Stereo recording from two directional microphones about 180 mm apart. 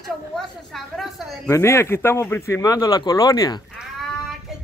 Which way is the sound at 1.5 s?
15° left (ahead or behind).